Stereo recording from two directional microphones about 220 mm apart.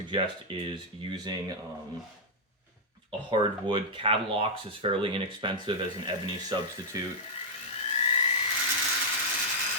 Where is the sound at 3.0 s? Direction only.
20° right (ahead or behind).